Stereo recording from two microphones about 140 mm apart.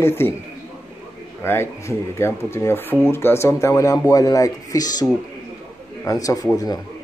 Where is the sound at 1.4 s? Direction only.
15° left (ahead or behind).